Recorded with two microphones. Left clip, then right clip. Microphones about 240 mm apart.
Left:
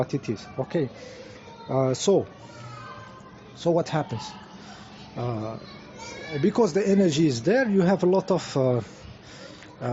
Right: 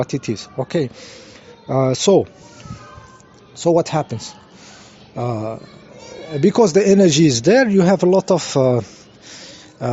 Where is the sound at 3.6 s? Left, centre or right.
Right.